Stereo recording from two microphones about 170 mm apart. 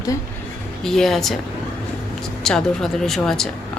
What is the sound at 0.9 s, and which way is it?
Speech, centre (ahead or behind).